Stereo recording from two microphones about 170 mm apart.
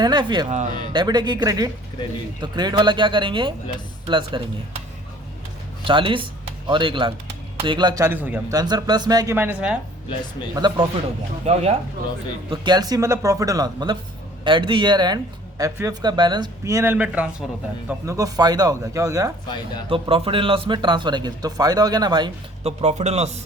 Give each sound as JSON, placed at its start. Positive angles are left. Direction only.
{"t": 0.0, "sound": "speech", "side_deg": -25}
{"t": 5.8, "sound": "speech", "side_deg": -30}
{"t": 8.0, "sound": "a man's voice", "side_deg": -10}
{"t": 8.5, "sound": "speech", "side_deg": -25}
{"t": 10.5, "sound": "speech", "side_deg": -25}
{"t": 11.4, "sound": "a man's voice", "side_deg": -40}
{"t": 12.5, "sound": "speech", "side_deg": -25}
{"t": 19.9, "sound": "speech", "side_deg": -30}
{"t": 22.6, "sound": "a man's voice", "side_deg": -40}